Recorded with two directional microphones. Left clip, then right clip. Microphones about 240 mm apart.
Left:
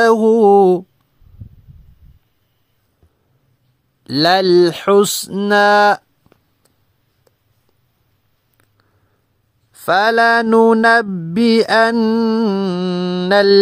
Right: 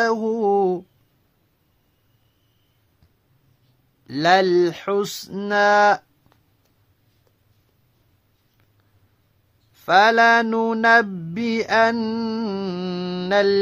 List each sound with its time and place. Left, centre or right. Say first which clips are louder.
0.0 s mantra: left 10 dB; left
4.0 s mantra: left 3 dB; left
9.8 s mantra: left 2 dB; left